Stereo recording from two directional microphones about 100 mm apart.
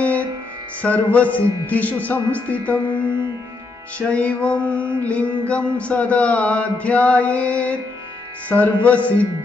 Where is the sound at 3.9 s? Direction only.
10° left (ahead or behind).